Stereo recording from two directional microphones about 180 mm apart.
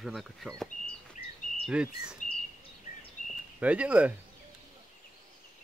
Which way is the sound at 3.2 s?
45° left (ahead or behind).